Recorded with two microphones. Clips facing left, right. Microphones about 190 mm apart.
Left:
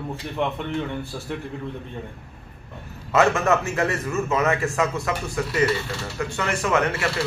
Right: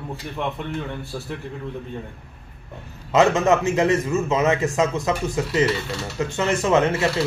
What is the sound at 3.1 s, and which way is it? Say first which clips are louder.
Mechanisms: right 2 dB; 20° right (ahead or behind).